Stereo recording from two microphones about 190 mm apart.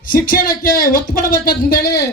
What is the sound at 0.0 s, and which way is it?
A man's voice, 45° left (ahead or behind).